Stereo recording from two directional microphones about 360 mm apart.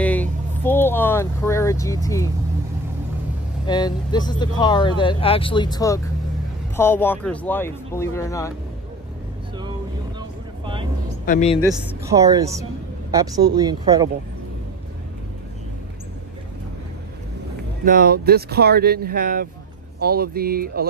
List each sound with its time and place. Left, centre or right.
0.0 s vehicle: centre
3.6 s speech: centre
10.6 s music: centre
11.2 s speech: centre
11.7 s speech: centre
17.8 s speech: right